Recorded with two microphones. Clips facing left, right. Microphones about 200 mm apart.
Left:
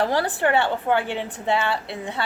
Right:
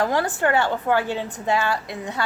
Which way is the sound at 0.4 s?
20° left (ahead or behind).